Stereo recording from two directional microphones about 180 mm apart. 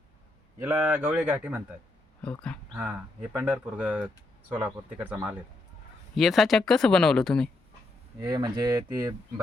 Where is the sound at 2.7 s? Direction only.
5° right (ahead or behind).